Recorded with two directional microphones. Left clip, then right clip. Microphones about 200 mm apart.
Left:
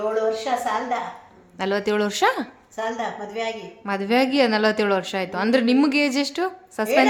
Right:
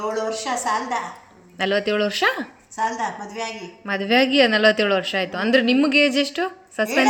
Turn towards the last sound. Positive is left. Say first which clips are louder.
# right 2 dB
turn(degrees=5)  # may be behind; listen again after turning